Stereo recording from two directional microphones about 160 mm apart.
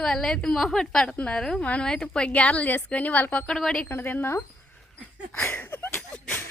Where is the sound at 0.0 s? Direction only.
5° left (ahead or behind).